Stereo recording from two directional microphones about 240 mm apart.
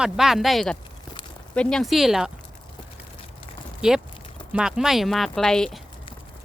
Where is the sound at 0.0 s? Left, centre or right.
Centre.